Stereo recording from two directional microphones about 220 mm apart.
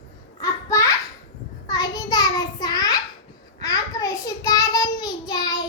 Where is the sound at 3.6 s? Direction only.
15° left (ahead or behind).